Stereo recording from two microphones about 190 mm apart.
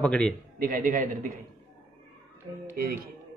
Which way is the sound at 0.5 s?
45° right (ahead or behind).